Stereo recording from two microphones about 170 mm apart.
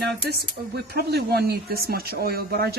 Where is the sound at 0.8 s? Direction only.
70° right (ahead or behind).